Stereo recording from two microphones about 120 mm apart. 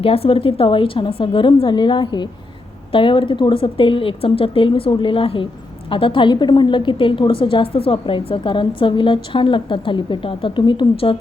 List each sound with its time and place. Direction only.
0.0 s a woman's voice: 55° left (ahead or behind)